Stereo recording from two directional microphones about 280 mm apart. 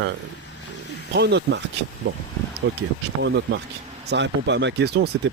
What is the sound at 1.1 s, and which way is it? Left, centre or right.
Speech, right.